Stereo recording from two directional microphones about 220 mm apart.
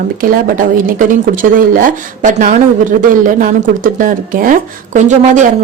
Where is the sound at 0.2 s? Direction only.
40° right (ahead or behind).